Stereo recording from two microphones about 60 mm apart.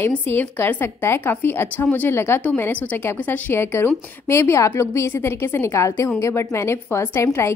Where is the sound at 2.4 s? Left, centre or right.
Left.